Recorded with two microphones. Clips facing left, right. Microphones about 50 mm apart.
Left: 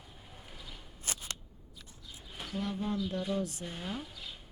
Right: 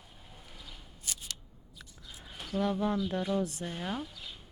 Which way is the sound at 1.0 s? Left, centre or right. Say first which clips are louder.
Left 2 dB; left.